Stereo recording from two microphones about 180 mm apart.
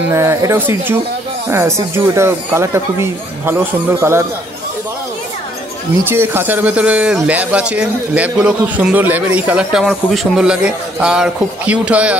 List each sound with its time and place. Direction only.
0.1 s speech: 15° right (ahead or behind)
6.0 s speech: 10° right (ahead or behind)